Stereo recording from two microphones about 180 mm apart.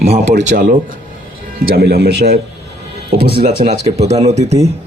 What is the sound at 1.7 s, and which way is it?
Speech, 60° right (ahead or behind).